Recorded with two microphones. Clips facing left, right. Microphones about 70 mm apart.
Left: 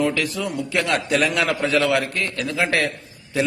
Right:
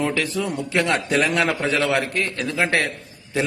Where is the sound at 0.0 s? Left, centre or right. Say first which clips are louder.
Left 1 dB; right.